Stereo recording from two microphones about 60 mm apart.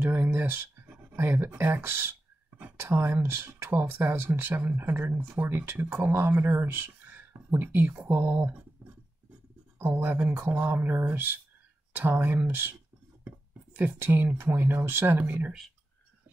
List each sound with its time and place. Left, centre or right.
0.0 s a sound: right
0.3 s speech: right
8.8 s a sound: right
9.8 s speech: right
10.4 s speech: right
10.8 s speech: right
13.7 s speech: right